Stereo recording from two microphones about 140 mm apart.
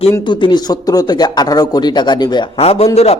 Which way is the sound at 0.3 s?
35° left (ahead or behind).